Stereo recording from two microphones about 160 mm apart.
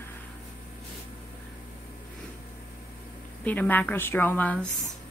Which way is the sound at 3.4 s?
10° left (ahead or behind).